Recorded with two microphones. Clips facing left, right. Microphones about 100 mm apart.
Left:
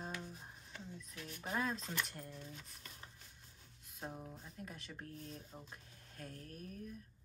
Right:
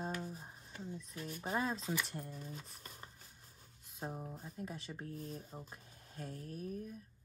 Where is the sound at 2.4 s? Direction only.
35° right (ahead or behind).